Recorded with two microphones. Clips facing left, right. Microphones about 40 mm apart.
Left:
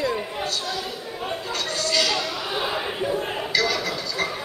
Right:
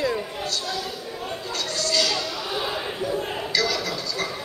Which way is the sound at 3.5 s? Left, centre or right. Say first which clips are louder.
Left 1 dB; centre.